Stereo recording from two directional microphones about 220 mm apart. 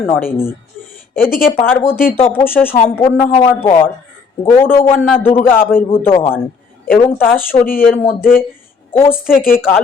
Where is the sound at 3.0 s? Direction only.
25° left (ahead or behind).